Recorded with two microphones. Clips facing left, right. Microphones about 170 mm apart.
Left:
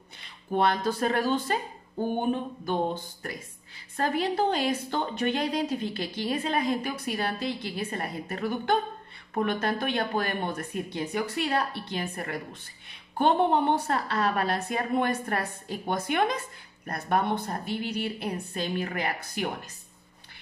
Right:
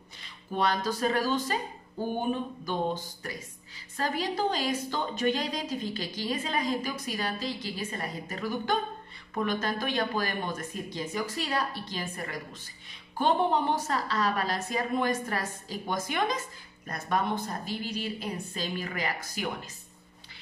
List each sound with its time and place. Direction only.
0.2 s speech: 55° left (ahead or behind)
2.6 s a woman's voice: 55° left (ahead or behind)